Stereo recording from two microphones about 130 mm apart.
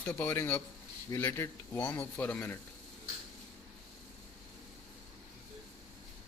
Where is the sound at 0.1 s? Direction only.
15° left (ahead or behind).